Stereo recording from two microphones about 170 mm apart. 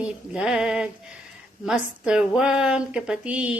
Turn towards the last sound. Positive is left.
turn(degrees=-5)  # may be behind; listen again after turning